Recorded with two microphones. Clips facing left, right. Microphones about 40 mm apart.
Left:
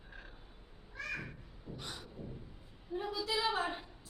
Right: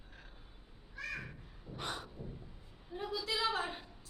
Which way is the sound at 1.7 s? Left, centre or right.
Right.